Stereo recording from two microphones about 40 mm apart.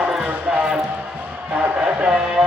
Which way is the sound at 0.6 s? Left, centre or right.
Centre.